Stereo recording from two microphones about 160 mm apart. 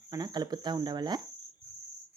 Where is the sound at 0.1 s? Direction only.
25° right (ahead or behind).